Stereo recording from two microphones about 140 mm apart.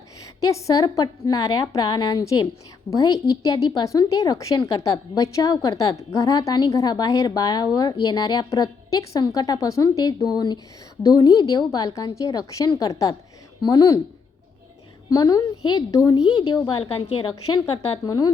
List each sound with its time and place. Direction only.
0.3 s a woman's voice: 25° left (ahead or behind)
15.1 s a woman's voice: 25° left (ahead or behind)